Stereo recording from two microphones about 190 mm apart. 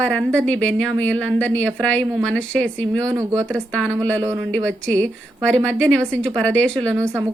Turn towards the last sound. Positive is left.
turn(degrees=5)  # may be behind; listen again after turning